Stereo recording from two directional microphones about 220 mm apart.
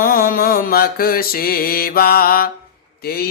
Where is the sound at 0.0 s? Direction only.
40° left (ahead or behind).